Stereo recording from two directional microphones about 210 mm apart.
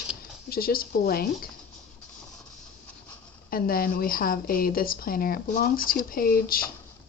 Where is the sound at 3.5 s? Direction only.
45° left (ahead or behind).